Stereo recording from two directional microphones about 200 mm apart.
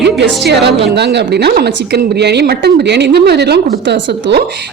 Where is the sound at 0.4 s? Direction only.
55° right (ahead or behind).